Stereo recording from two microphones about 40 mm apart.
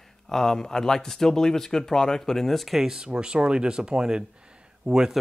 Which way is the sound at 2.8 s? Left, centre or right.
Centre.